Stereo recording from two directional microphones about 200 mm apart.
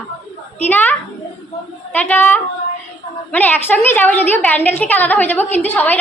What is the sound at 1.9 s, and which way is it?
A woman's voice, 10° left (ahead or behind).